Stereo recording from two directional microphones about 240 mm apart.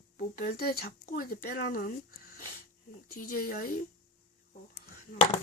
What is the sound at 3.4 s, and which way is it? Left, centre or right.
Speech, left.